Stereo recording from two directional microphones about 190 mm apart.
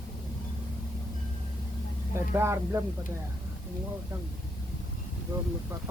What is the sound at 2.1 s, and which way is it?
Speech, 15° right (ahead or behind).